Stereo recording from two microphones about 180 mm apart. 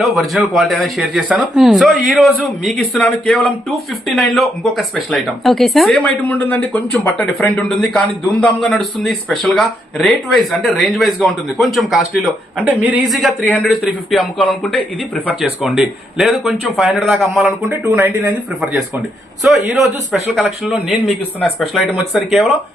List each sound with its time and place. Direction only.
0.0 s speech: centre (ahead or behind)
22.1 s speech: centre (ahead or behind)